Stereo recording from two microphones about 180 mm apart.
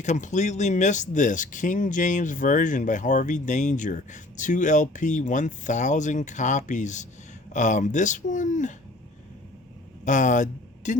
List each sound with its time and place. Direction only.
0.0 s speech: 40° left (ahead or behind)
10.0 s speech: 45° left (ahead or behind)